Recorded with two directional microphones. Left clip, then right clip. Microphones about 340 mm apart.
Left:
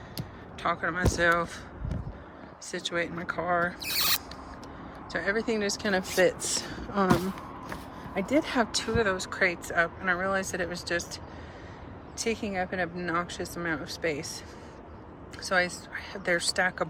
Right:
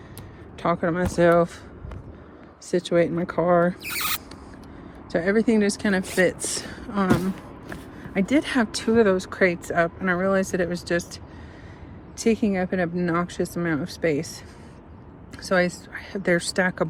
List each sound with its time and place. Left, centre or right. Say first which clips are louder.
0.6 s speech: right 5 dB; centre
2.6 s speech: right 10 dB; centre
5.1 s speech: right 7 dB; centre
8.4 s speech: right 4 dB; right
15.4 s speech: right 5 dB; centre